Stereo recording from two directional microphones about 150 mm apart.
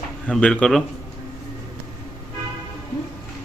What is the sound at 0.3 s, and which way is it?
Speech, 5° left (ahead or behind).